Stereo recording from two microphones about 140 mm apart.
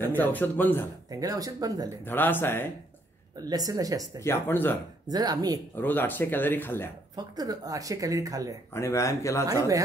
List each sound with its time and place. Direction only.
0.0 s speech: 15° left (ahead or behind)
1.1 s speech: 25° right (ahead or behind)
2.0 s speech: 15° left (ahead or behind)
3.4 s speech: 25° right (ahead or behind)
4.2 s speech: 15° left (ahead or behind)
5.0 s speech: 30° right (ahead or behind)
5.8 s speech: 15° left (ahead or behind)
7.2 s speech: 25° right (ahead or behind)
8.7 s speech: 20° left (ahead or behind)